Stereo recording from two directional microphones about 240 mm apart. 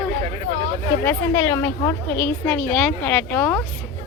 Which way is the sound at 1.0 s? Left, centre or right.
Centre.